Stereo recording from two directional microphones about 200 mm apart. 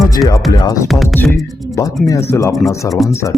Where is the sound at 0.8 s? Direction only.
Centre (ahead or behind).